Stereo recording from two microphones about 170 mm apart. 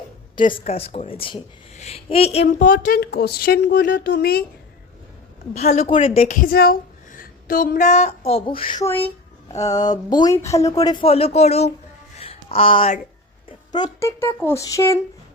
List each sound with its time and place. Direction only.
0.3 s a woman's voice: 30° left (ahead or behind)
2.6 s a woman's voice: 55° left (ahead or behind)
5.5 s a woman's voice: 40° left (ahead or behind)
6.2 s a woman's voice: 55° left (ahead or behind); by 8.7 s 30° left (ahead or behind)
8.8 s speech: 10° left (ahead or behind)
9.5 s a sound: 40° left (ahead or behind)
10.1 s a woman's voice: 25° left (ahead or behind)
11.0 s a woman's voice: 35° left (ahead or behind)
12.1 s a sound: 35° left (ahead or behind)
13.7 s a woman's voice: 25° left (ahead or behind)
14.2 s speech: 15° left (ahead or behind)